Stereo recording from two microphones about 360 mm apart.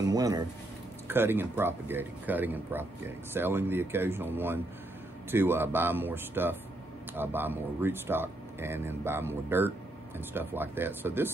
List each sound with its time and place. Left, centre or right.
0.0 s speech: centre